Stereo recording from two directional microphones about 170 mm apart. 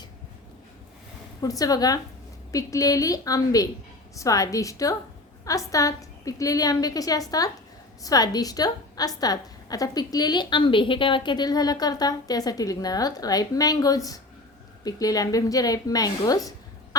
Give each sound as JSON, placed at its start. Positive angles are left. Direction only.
{"t": 1.4, "sound": "a woman's voice", "side_deg": 20}